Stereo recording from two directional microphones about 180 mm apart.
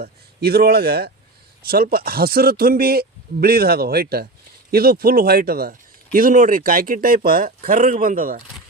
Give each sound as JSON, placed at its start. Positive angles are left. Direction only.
{"t": 0.0, "sound": "a man's voice", "side_deg": -60}